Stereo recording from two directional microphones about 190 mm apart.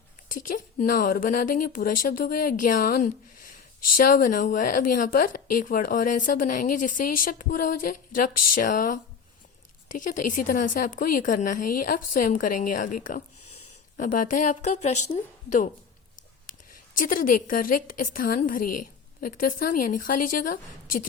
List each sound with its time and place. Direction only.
0.3 s speech: 45° left (ahead or behind)
17.0 s speech: 45° left (ahead or behind)